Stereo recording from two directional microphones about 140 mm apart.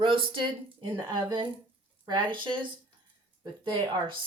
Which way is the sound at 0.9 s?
30° right (ahead or behind).